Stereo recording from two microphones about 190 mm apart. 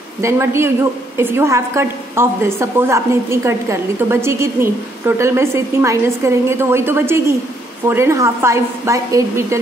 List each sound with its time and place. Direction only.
0.2 s a woman's voice: 15° right (ahead or behind)